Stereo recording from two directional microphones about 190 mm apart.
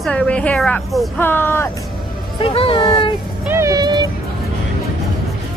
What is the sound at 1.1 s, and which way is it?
Speech, 10° left (ahead or behind).